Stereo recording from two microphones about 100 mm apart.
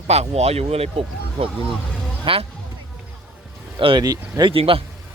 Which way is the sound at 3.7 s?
55° right (ahead or behind).